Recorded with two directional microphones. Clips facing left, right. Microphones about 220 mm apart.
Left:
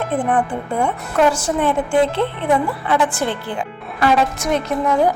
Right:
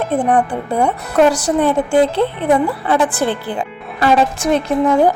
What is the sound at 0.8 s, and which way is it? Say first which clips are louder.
A woman's voice: right 4 dB; 40° right (ahead or behind).